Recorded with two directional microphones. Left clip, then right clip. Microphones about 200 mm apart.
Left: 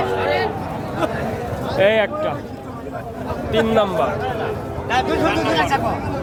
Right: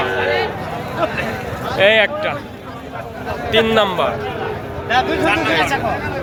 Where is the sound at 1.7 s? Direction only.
15° left (ahead or behind).